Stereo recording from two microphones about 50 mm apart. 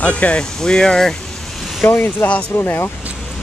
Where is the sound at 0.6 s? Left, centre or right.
Centre.